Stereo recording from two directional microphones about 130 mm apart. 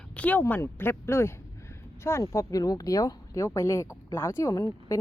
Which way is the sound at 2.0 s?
20° left (ahead or behind).